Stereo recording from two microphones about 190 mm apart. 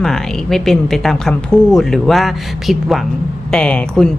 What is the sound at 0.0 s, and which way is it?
Speech, 5° left (ahead or behind).